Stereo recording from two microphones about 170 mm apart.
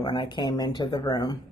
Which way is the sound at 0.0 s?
25° left (ahead or behind).